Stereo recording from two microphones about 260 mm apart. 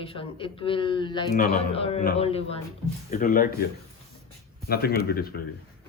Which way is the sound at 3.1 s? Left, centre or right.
Left.